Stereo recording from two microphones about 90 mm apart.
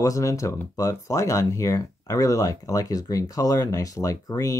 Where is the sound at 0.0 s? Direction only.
35° left (ahead or behind).